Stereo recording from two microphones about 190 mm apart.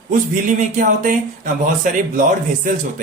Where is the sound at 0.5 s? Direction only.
45° right (ahead or behind).